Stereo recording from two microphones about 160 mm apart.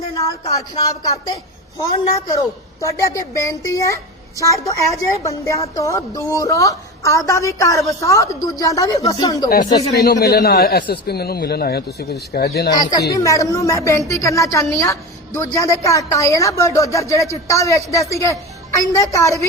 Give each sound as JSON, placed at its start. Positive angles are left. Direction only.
{"t": 0.1, "sound": "a sound", "side_deg": 20}
{"t": 1.9, "sound": "a woman's voice", "side_deg": 25}
{"t": 10.0, "sound": "speech", "side_deg": 85}
{"t": 12.7, "sound": "a woman's voice", "side_deg": 25}